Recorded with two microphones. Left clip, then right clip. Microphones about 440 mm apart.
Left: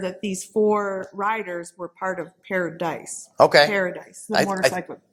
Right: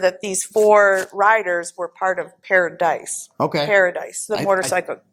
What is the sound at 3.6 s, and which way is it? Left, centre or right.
Speech, right.